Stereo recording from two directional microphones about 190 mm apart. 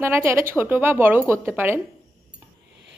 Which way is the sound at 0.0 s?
15° right (ahead or behind).